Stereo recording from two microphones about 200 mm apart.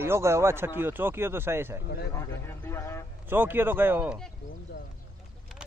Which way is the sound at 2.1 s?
15° left (ahead or behind).